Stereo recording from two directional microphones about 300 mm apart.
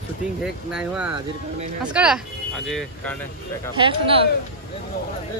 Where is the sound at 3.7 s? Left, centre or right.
Centre.